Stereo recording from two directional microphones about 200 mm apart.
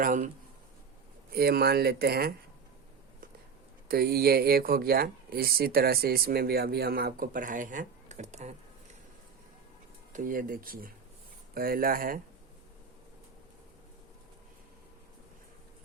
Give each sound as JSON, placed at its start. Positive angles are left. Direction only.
{"t": 0.0, "sound": "speech", "side_deg": -40}
{"t": 1.3, "sound": "speech", "side_deg": -50}
{"t": 3.8, "sound": "speech", "side_deg": -50}
{"t": 10.1, "sound": "speech", "side_deg": -40}